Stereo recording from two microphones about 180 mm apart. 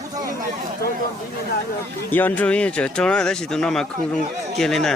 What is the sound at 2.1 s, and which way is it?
Speech, 10° left (ahead or behind).